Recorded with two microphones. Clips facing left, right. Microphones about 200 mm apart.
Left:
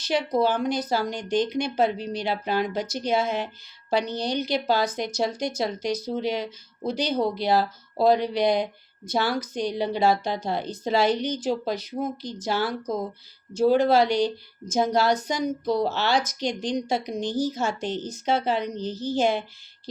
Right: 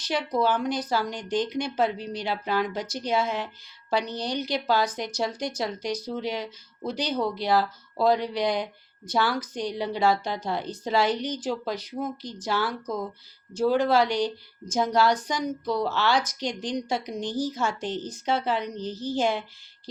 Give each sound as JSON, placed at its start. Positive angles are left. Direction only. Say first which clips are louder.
{"t": 0.1, "sound": "a woman's voice", "louder": "left 2 dB", "side_deg": 25}